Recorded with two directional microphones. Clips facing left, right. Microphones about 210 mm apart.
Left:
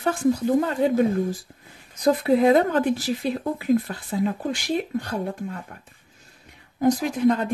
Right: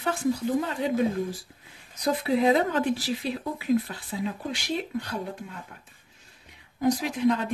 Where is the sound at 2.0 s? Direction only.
50° left (ahead or behind).